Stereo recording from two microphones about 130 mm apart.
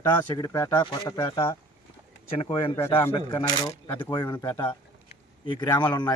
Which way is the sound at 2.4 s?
45° left (ahead or behind).